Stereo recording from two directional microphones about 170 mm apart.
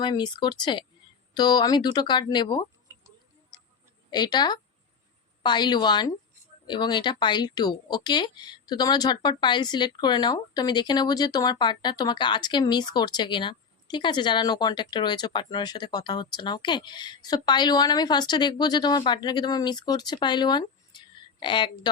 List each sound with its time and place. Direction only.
0.0 s speech: 25° left (ahead or behind)
4.1 s speech: 25° left (ahead or behind)